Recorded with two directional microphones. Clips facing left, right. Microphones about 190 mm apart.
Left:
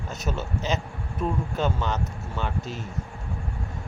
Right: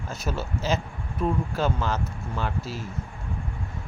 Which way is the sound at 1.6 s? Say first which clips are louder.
Left 2 dB; centre (ahead or behind).